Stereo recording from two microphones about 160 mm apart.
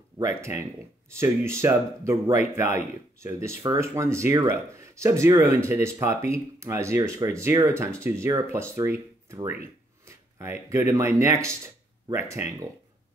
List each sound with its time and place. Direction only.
0.2 s speech: 15° right (ahead or behind)